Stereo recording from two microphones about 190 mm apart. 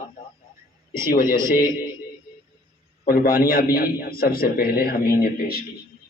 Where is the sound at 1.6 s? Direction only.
20° left (ahead or behind).